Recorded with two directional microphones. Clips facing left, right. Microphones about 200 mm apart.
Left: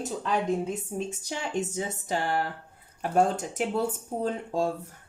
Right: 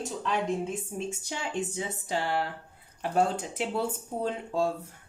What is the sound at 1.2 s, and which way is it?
Speech, 40° left (ahead or behind).